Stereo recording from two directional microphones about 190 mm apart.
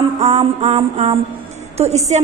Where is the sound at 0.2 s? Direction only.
35° right (ahead or behind).